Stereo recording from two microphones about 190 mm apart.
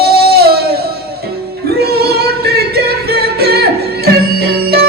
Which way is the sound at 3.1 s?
55° right (ahead or behind).